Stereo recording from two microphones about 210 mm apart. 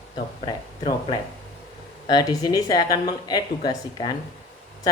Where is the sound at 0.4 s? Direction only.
20° left (ahead or behind).